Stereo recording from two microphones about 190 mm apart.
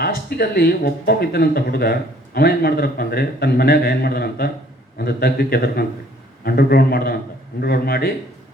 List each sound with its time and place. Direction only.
0.0 s speech: 55° left (ahead or behind)